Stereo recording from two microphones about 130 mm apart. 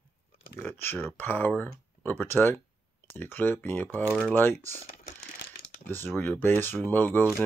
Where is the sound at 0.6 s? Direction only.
15° left (ahead or behind).